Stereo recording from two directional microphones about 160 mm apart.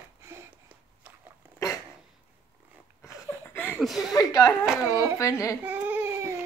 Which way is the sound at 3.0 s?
15° left (ahead or behind).